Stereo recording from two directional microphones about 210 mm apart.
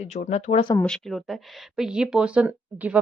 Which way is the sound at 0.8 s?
Centre (ahead or behind).